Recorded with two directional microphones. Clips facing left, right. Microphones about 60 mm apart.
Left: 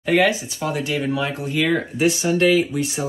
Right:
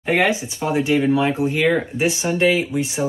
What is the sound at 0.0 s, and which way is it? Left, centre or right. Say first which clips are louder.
Speech: left 1 dB; right.